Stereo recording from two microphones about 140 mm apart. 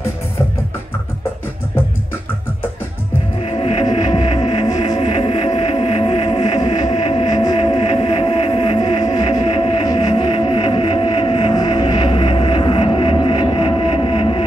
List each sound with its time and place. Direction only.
3.4 s music: 45° left (ahead or behind)
3.8 s music: 35° left (ahead or behind)
5.0 s music: 40° left (ahead or behind)
6.5 s music: 30° left (ahead or behind)